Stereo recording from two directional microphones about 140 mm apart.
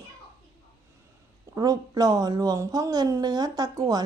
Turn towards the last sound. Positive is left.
turn(degrees=-25)  # may be behind; listen again after turning